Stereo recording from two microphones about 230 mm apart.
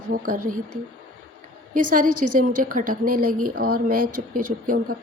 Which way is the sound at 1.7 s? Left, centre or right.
Right.